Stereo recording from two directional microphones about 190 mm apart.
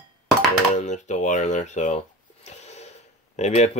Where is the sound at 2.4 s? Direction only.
35° left (ahead or behind).